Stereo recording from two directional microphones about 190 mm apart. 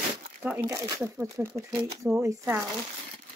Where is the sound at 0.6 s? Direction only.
15° right (ahead or behind).